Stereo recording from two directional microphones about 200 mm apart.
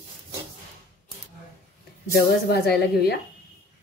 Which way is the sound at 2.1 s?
50° left (ahead or behind).